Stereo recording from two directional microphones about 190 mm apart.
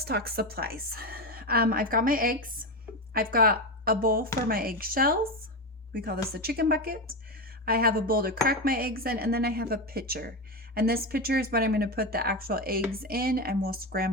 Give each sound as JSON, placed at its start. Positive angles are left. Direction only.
{"t": 0.0, "sound": "a woman's voice", "side_deg": -55}